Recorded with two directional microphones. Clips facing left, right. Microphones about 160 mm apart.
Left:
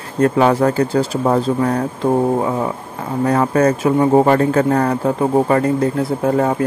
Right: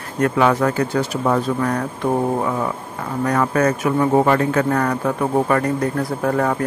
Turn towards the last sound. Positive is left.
turn(degrees=25)  # may be behind; listen again after turning